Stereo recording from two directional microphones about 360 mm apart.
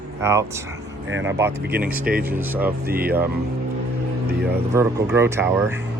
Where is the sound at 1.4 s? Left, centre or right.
Centre.